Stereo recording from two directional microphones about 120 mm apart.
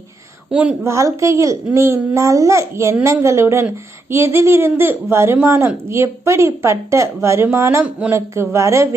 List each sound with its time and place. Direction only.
0.5 s a woman's voice: 10° right (ahead or behind)
0.9 s a woman's voice: 25° right (ahead or behind)
7.9 s a woman's voice: 10° right (ahead or behind)
8.1 s a woman's voice: 25° right (ahead or behind)